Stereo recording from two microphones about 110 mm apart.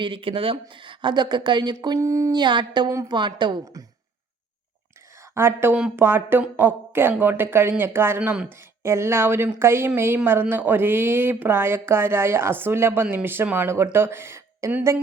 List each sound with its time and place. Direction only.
0.0 s speech: 50° right (ahead or behind)
2.0 s speech: 25° right (ahead or behind)
2.3 s speech: 45° right (ahead or behind)
3.6 s speech: 30° right (ahead or behind)
5.3 s speech: 25° right (ahead or behind)